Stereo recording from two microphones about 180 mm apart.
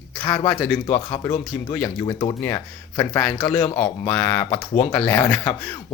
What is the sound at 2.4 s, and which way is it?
Speech, 15° left (ahead or behind).